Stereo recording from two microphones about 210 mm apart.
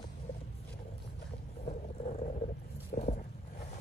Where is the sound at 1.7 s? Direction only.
30° left (ahead or behind).